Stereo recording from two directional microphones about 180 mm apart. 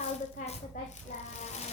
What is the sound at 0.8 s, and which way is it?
Speech, 45° left (ahead or behind).